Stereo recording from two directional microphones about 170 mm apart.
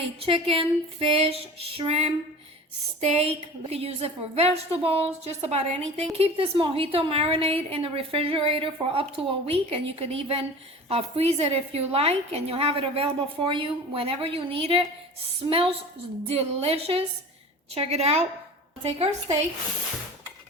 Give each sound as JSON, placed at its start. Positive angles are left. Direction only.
{"t": 0.2, "sound": "a woman's voice", "side_deg": -35}